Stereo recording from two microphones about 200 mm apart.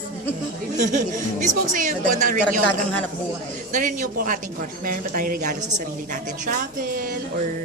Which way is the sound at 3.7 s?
40° right (ahead or behind).